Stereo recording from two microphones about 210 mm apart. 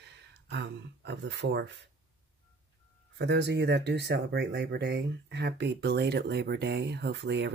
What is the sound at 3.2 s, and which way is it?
Speech, 55° right (ahead or behind).